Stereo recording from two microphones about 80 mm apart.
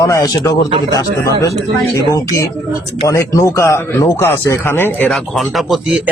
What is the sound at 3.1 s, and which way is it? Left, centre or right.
Speech, left.